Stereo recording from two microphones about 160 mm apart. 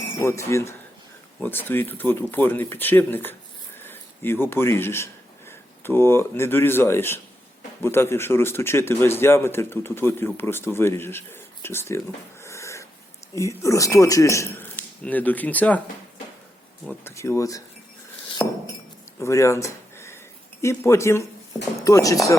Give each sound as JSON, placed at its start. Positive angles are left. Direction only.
{"t": 0.2, "sound": "speech", "side_deg": 15}
{"t": 12.4, "sound": "a sound", "side_deg": 20}
{"t": 13.3, "sound": "speech", "side_deg": 20}
{"t": 16.8, "sound": "speech", "side_deg": 10}
{"t": 19.2, "sound": "speech", "side_deg": 20}